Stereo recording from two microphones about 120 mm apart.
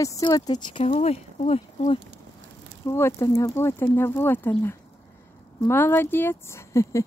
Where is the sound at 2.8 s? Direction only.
25° left (ahead or behind).